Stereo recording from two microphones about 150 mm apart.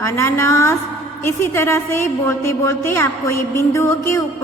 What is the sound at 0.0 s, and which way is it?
A woman's voice, 20° left (ahead or behind).